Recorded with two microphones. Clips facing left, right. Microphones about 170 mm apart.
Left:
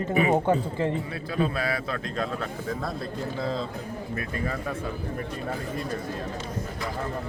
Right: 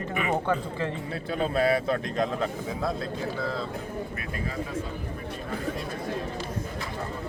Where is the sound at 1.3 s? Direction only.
25° right (ahead or behind).